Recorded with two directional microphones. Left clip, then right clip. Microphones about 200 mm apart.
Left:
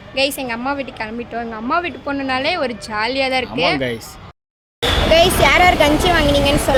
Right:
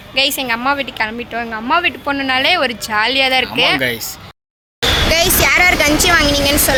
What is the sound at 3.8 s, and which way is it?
Speech, 15° left (ahead or behind).